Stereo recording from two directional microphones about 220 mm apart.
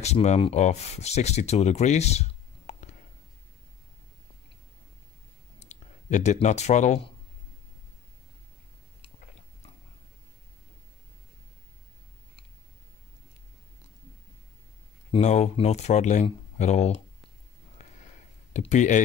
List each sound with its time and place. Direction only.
0.0 s speech: 30° left (ahead or behind)
5.6 s speech: 35° left (ahead or behind)
15.0 s speech: 30° left (ahead or behind)
17.8 s sniff: 30° left (ahead or behind)
18.5 s speech: 30° left (ahead or behind)